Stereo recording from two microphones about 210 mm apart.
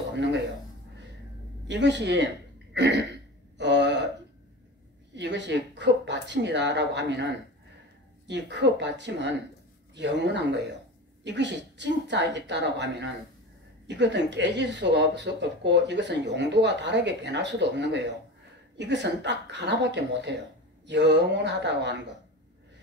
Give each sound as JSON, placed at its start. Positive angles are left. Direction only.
{"t": 0.1, "sound": "a sound", "side_deg": -55}
{"t": 1.7, "sound": "throat clearing", "side_deg": -55}
{"t": 5.1, "sound": "speech", "side_deg": -55}
{"t": 8.3, "sound": "speech", "side_deg": -55}